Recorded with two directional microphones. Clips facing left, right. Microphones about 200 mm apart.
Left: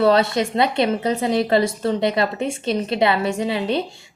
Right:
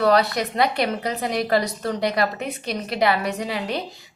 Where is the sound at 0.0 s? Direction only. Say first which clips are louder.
Left 2 dB; 25° left (ahead or behind).